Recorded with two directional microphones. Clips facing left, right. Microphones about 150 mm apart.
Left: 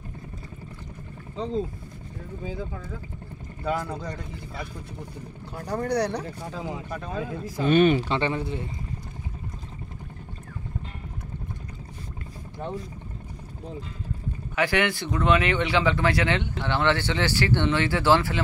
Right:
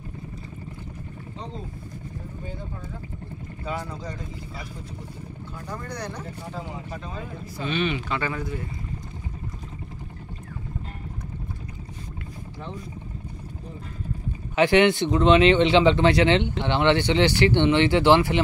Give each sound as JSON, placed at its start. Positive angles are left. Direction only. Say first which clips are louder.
{"t": 5.7, "sound": "speech", "louder": "left 10 dB", "side_deg": 70}
{"t": 6.9, "sound": "speech", "louder": "left 4 dB", "side_deg": 90}
{"t": 7.5, "sound": "speech", "louder": "left 8 dB", "side_deg": 45}
{"t": 8.1, "sound": "speech", "louder": "left 2 dB", "side_deg": 25}
{"t": 14.5, "sound": "speech", "louder": "right 7 dB", "side_deg": -25}